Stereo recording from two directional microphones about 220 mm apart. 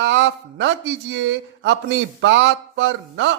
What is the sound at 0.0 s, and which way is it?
A man's voice, 55° right (ahead or behind).